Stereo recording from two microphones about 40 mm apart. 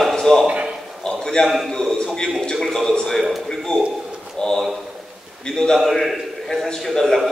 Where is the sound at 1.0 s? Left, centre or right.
Centre.